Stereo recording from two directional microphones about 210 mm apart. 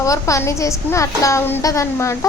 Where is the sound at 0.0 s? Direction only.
15° left (ahead or behind).